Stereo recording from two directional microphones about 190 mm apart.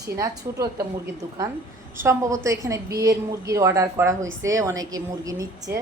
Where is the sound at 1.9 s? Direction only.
15° right (ahead or behind).